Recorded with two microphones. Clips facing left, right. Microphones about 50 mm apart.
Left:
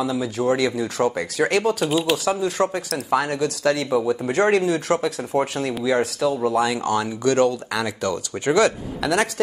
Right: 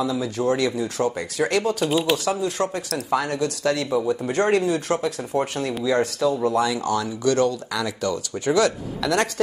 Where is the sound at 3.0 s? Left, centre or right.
Left.